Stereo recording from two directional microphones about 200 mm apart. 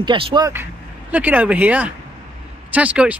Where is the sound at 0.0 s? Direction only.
25° right (ahead or behind).